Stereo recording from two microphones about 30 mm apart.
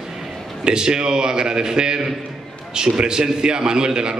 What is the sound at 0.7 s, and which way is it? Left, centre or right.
A man's voice, right.